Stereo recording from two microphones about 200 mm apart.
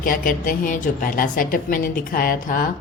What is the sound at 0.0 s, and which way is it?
A woman's voice, 45° left (ahead or behind).